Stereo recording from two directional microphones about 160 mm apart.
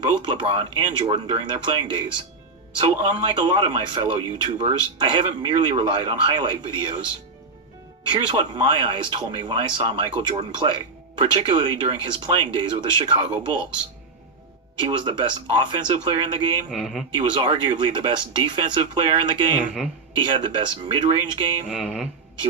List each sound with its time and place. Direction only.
0.2 s speech: 30° right (ahead or behind)
8.0 s speech: 30° right (ahead or behind)
14.8 s speech: 30° right (ahead or behind)
16.7 s speech: centre (ahead or behind)
17.2 s speech: 30° right (ahead or behind)
19.5 s speech: 5° right (ahead or behind)
20.2 s speech: 30° right (ahead or behind)
21.7 s speech: 5° right (ahead or behind)